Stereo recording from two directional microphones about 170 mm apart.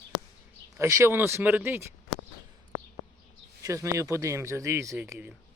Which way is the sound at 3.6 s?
20° right (ahead or behind).